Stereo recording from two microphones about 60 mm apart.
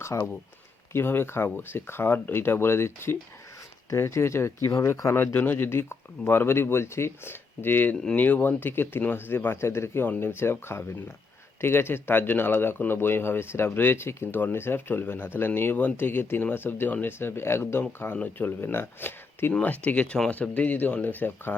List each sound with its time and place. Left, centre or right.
0.1 s speech: left
0.9 s speech: left
5.1 s speech: left